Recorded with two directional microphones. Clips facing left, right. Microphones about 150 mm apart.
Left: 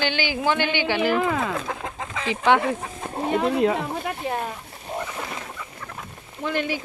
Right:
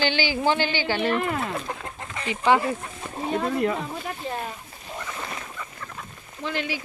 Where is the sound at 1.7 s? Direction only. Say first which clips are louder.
Left 2 dB; 90° left.